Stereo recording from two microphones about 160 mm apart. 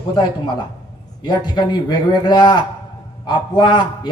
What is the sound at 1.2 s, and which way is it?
A man's voice, 25° left (ahead or behind).